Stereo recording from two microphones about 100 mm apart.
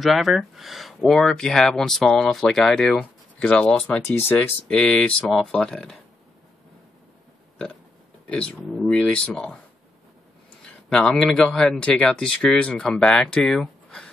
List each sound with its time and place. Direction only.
0.0 s speech: centre (ahead or behind)
4.1 s speech: 20° left (ahead or behind)
4.6 s speech: 5° left (ahead or behind)
8.3 s speech: 10° left (ahead or behind)
10.6 s speech: 10° left (ahead or behind)